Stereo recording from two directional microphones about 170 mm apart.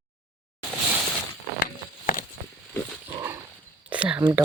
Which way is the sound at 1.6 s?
55° left (ahead or behind).